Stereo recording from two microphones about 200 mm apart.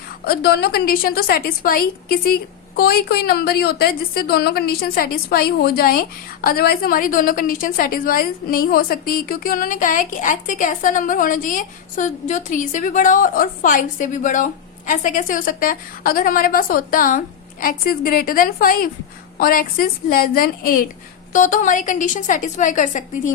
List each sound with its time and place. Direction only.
0.3 s a woman's voice: 55° left (ahead or behind)